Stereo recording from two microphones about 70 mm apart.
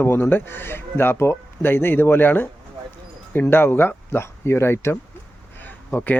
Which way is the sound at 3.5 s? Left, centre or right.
Left.